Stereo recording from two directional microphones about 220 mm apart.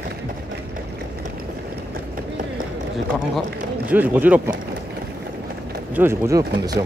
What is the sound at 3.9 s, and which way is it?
Speech, 5° right (ahead or behind).